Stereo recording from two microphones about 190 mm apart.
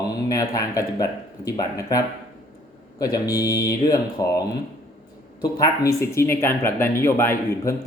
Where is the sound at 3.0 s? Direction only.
20° left (ahead or behind).